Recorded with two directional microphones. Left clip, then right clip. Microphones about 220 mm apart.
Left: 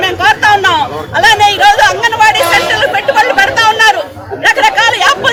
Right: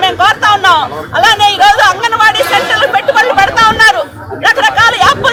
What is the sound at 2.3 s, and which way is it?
Chatter, centre (ahead or behind).